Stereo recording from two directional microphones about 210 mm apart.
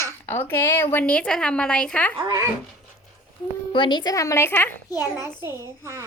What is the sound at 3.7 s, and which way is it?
A child's voice, 20° left (ahead or behind).